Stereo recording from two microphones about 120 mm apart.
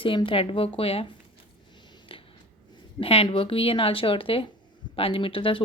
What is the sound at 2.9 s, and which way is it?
Speech, 50° left (ahead or behind).